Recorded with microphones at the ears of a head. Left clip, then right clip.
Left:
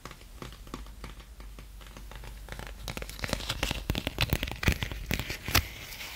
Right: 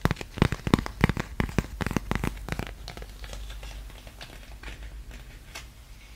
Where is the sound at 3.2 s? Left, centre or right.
Left.